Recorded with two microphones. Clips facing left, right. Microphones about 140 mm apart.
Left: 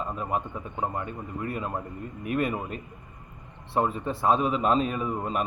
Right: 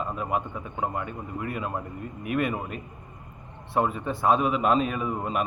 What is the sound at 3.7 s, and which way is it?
A man's voice, 30° left (ahead or behind).